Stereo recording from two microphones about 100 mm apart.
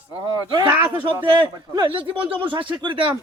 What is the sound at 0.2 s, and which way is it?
Speech, 50° right (ahead or behind).